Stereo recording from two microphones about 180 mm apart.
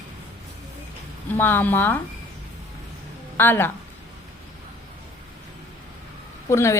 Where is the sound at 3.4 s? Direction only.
10° left (ahead or behind).